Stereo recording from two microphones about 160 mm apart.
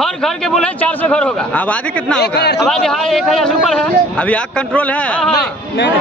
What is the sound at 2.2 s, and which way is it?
Speech, 90° left.